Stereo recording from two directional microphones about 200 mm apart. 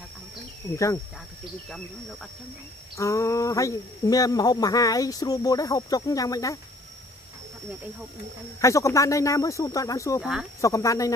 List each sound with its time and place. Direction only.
3.0 s speech: 15° left (ahead or behind)
8.5 s speech: 15° left (ahead or behind)